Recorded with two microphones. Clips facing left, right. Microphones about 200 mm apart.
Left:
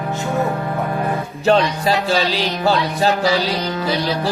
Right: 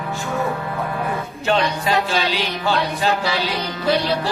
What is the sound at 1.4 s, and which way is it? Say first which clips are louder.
Music: left 5 dB; 35° left (ahead or behind).